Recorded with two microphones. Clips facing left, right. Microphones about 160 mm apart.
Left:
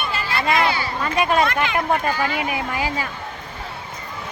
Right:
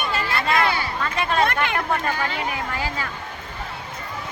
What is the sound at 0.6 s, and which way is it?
Speech, 55° right (ahead or behind).